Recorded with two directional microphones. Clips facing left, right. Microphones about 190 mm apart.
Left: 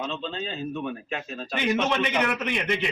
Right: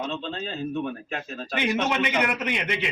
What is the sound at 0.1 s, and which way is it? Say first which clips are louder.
A man's voice: right 1 dB; 5° right (ahead or behind).